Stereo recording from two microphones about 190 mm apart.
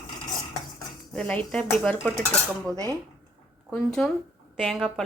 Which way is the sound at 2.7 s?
15° right (ahead or behind).